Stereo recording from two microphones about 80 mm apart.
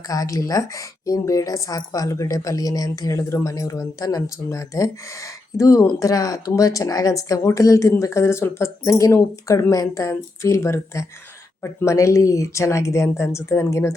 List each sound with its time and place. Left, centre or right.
0.1 s a woman's voice: left
8.8 s a woman's voice: left
11.9 s a woman's voice: left